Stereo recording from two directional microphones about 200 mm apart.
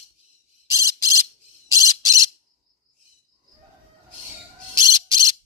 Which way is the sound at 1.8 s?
15° right (ahead or behind).